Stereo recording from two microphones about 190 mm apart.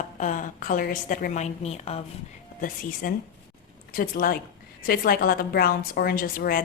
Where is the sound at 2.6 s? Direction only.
45° left (ahead or behind).